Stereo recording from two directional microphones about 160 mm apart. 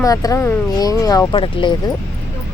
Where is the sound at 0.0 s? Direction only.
20° left (ahead or behind).